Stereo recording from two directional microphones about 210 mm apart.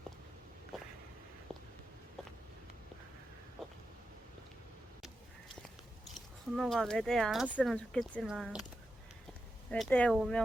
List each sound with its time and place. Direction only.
6.1 s speech: centre (ahead or behind)
9.6 s speech: 5° left (ahead or behind)